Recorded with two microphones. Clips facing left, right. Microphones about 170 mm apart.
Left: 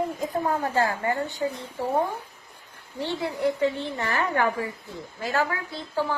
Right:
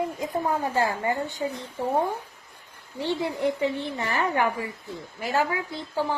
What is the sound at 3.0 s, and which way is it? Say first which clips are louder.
A woman's voice: even; 15° right (ahead or behind).